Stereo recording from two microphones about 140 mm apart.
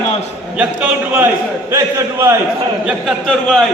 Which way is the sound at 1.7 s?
20° right (ahead or behind).